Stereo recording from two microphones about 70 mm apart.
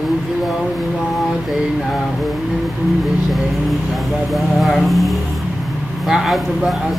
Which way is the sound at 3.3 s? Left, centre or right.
Centre.